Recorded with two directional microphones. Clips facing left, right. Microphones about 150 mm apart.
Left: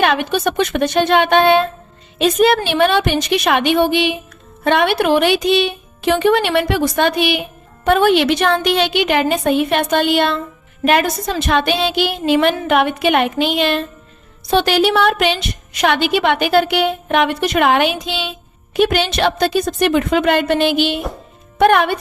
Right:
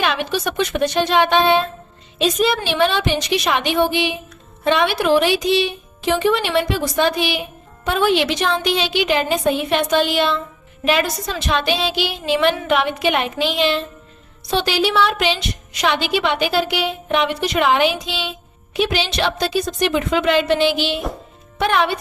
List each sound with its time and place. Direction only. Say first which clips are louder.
0.0 s a woman's voice: left 5 dB; 55° left (ahead or behind)